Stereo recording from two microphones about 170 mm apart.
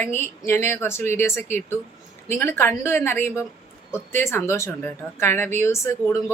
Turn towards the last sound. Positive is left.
turn(degrees=15)  # may be behind; listen again after turning